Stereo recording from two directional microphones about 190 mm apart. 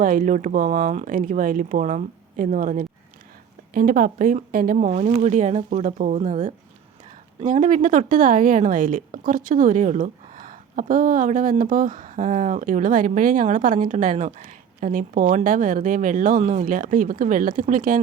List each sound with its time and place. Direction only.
0.0 s a woman's voice: 45° right (ahead or behind)